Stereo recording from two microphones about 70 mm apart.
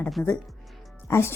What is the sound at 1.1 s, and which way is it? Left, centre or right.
Speech, left.